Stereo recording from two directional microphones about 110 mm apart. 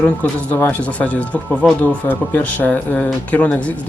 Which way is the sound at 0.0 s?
10° left (ahead or behind).